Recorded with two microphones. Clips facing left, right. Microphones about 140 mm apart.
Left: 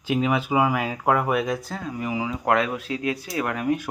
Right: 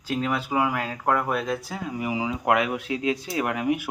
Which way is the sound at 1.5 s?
10° right (ahead or behind).